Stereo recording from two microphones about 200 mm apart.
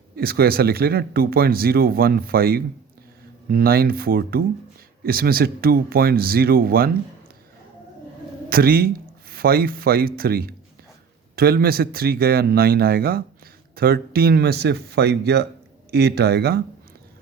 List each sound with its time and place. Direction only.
0.2 s speech: 50° right (ahead or behind)
8.4 s speech: 50° right (ahead or behind)